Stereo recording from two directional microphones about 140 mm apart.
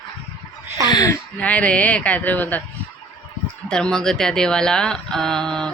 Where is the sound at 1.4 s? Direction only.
10° left (ahead or behind).